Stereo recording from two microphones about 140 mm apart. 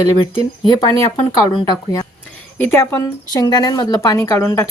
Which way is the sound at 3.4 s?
30° left (ahead or behind).